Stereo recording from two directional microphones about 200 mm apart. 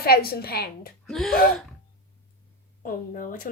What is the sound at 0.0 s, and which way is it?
Speech, 50° left (ahead or behind).